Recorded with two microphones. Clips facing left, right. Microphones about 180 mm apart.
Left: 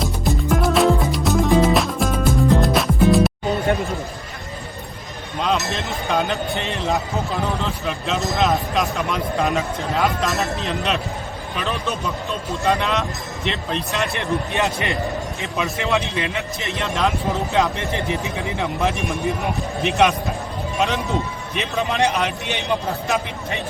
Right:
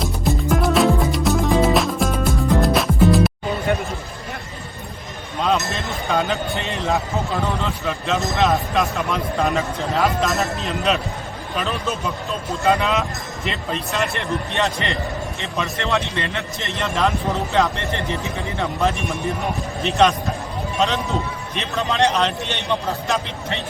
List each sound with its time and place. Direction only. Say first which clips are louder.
0.0 s music: even; centre (ahead or behind)
5.4 s a man's voice: right 1 dB; centre (ahead or behind)
19.8 s a man's voice: right 1 dB; 15° left (ahead or behind)